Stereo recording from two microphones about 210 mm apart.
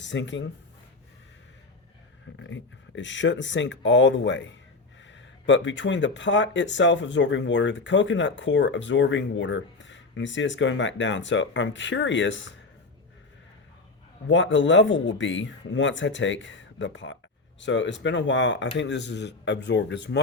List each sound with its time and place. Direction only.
0.0 s speech: 60° left (ahead or behind)
2.4 s speech: 60° left (ahead or behind)
14.3 s speech: 60° left (ahead or behind)